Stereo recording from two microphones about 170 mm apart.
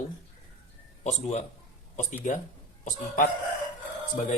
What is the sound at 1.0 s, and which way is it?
Speech, 40° left (ahead or behind).